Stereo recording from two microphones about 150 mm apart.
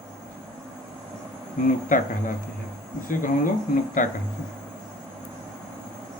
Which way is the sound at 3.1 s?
65° left (ahead or behind).